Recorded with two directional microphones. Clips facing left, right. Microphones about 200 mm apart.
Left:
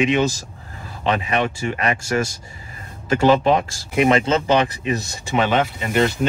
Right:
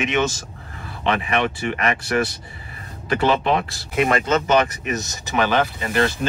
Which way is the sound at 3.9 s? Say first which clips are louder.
Left 3 dB; 20° left (ahead or behind).